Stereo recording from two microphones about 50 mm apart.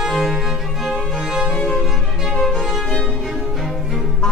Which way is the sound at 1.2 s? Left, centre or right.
Centre.